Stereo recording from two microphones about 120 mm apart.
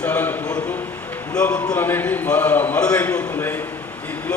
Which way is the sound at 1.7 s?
15° left (ahead or behind).